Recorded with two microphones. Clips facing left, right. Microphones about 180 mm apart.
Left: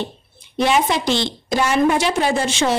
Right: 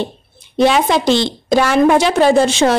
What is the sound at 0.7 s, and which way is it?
Speech, 90° right.